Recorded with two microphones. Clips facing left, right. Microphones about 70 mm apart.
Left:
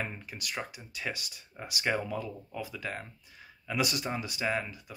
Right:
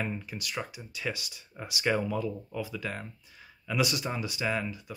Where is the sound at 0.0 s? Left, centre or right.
Left.